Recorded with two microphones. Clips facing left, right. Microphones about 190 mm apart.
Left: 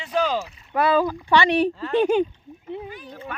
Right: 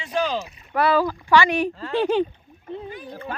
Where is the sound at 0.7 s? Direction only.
20° left (ahead or behind).